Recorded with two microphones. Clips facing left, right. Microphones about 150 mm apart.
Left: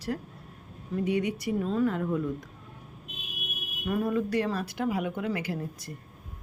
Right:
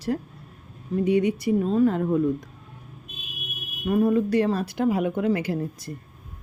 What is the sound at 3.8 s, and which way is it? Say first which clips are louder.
Speech: right 7 dB; 25° right (ahead or behind).